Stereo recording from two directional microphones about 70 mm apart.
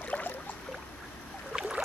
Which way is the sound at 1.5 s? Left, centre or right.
Centre.